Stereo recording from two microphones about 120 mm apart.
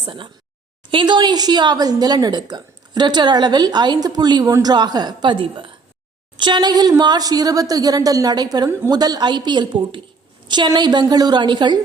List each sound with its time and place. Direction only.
0.0 s a woman's voice: 45° right (ahead or behind)